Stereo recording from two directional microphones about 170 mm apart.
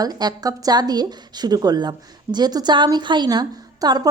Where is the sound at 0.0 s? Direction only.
25° right (ahead or behind).